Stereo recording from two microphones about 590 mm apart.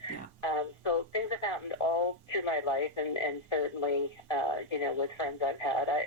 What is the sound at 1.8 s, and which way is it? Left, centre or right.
Speech, left.